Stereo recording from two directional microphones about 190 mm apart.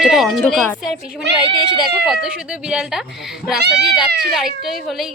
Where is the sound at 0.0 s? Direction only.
Centre (ahead or behind).